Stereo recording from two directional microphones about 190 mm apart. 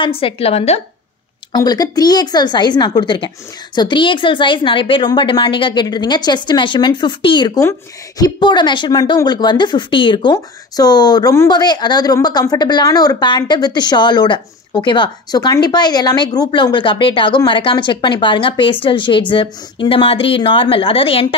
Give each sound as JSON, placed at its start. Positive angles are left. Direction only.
{"t": 0.0, "sound": "a woman's voice", "side_deg": 30}
{"t": 1.5, "sound": "speech", "side_deg": 20}